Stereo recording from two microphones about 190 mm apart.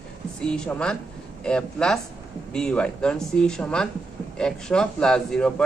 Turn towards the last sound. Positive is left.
turn(degrees=5)  # may be behind; listen again after turning